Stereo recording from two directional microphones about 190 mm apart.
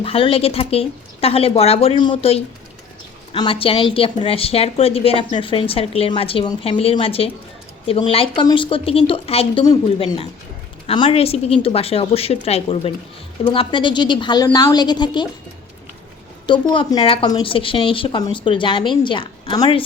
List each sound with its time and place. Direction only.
0.0 s a woman's voice: 30° left (ahead or behind)
16.5 s a woman's voice: 25° left (ahead or behind)